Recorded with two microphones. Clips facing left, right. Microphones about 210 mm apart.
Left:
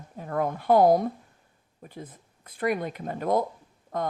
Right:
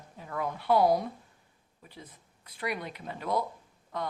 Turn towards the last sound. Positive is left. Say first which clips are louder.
# left 6 dB
turn(degrees=50)  # may be behind; listen again after turning